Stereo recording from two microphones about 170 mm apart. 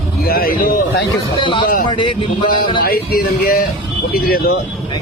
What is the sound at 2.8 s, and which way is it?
A man's voice, 60° left (ahead or behind).